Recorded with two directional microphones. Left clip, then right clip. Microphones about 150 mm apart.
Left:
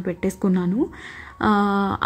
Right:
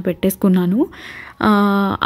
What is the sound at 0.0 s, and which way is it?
A woman's voice, 40° right (ahead or behind).